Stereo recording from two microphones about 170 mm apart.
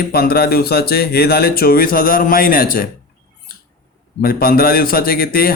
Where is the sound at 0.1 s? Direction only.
65° left (ahead or behind).